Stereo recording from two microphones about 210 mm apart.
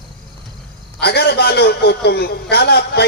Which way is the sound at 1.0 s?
50° left (ahead or behind).